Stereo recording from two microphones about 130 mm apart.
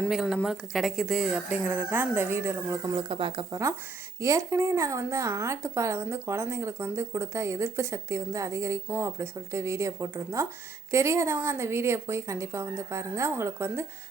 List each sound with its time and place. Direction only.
0.1 s a woman's voice: 5° right (ahead or behind); by 2.9 s 20° right (ahead or behind)
2.9 s speech: 40° right (ahead or behind)
3.5 s a woman's voice: 25° right (ahead or behind)